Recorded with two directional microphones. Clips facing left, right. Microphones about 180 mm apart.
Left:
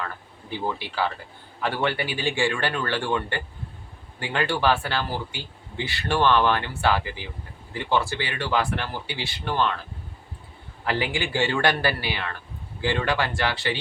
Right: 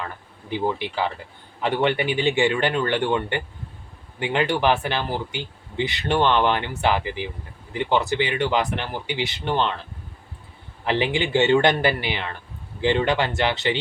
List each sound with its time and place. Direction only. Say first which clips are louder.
0.5 s speech: right 4 dB; 20° right (ahead or behind)
10.8 s speech: right 4 dB; 20° right (ahead or behind)